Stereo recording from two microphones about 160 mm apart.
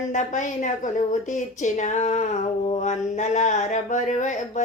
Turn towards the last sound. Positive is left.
turn(degrees=50)  # may be behind; listen again after turning